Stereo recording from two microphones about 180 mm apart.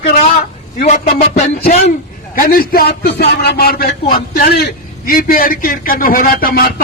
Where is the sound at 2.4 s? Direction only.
55° left (ahead or behind).